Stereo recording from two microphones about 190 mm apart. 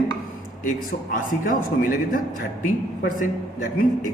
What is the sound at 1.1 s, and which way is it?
A man's voice, 45° left (ahead or behind).